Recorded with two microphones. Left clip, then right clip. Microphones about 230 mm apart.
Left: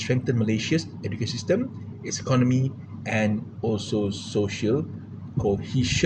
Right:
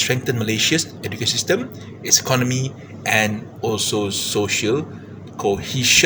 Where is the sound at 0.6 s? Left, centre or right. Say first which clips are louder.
Right 8 dB; right.